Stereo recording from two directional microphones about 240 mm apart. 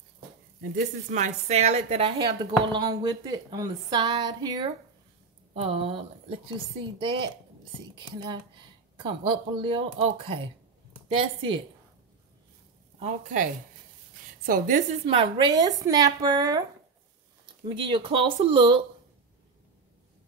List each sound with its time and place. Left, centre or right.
1.1 s a woman's voice: right
8.9 s speech: right
13.0 s a woman's voice: right
15.0 s a woman's voice: right
17.6 s speech: right